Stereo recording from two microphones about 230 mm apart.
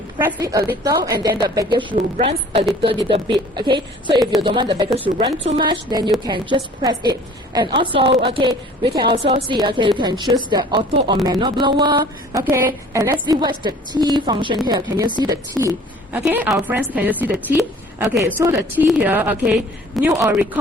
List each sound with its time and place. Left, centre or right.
0.2 s a woman's voice: centre